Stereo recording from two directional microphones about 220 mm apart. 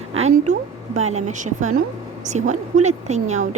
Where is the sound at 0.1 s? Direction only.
30° right (ahead or behind).